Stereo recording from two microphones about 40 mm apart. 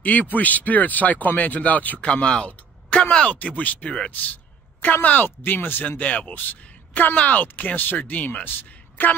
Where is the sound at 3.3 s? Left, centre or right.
Left.